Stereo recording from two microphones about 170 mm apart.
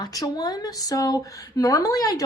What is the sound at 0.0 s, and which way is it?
Speech, 20° left (ahead or behind).